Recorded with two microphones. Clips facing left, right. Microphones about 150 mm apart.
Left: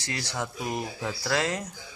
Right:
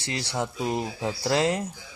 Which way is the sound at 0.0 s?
30° right (ahead or behind).